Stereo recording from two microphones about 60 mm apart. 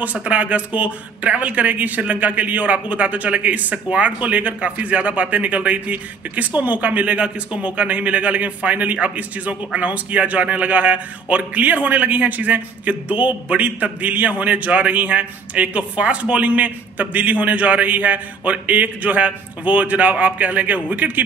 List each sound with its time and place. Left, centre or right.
0.0 s speech: right